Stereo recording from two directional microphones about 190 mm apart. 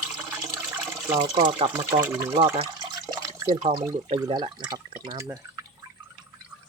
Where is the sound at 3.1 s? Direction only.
20° right (ahead or behind).